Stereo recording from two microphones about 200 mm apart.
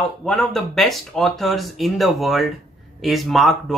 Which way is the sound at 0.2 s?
5° left (ahead or behind).